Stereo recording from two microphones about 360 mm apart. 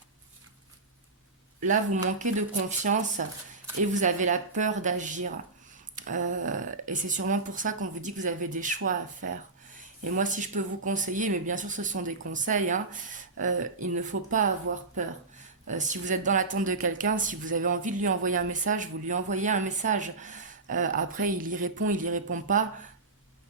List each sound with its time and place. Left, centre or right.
1.6 s speech: right
8.8 s speech: right
9.7 s speech: right